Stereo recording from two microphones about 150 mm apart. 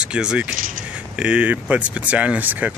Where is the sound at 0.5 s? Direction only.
65° right (ahead or behind).